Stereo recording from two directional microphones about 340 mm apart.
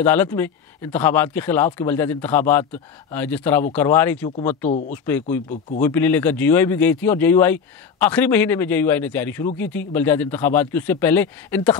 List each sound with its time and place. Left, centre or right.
0.0 s speech: centre
4.6 s speech: left
4.9 s speech: centre